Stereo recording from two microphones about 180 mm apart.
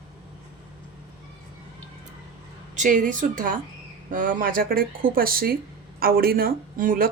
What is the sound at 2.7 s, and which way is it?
Speech, 45° right (ahead or behind).